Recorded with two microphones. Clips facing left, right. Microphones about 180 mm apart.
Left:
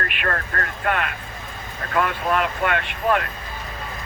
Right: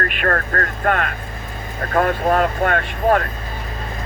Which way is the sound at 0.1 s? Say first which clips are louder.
Right 5 dB; 45° right (ahead or behind).